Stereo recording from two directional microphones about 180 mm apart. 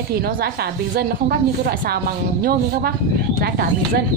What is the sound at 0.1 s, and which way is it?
Speech, 60° right (ahead or behind).